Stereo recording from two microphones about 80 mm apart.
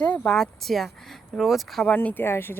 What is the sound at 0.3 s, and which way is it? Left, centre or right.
Speech, centre.